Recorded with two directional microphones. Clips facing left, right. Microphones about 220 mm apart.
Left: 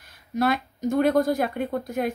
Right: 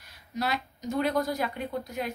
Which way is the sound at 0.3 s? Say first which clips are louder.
Left 8 dB; 50° left (ahead or behind).